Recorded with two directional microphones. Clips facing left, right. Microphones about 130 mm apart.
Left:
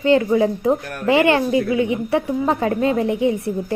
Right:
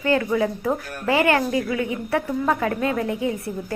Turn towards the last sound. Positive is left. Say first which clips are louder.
# left 6 dB
turn(degrees=25)  # may be behind; listen again after turning